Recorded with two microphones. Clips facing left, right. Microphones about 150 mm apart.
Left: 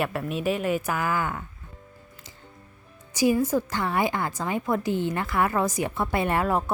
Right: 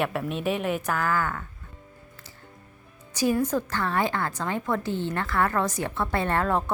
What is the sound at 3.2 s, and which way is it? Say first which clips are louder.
A woman's voice: left 2 dB; 10° left (ahead or behind).